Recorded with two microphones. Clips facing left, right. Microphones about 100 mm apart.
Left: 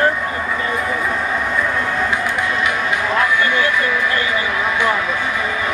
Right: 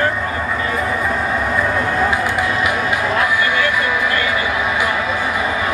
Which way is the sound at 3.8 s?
10° right (ahead or behind).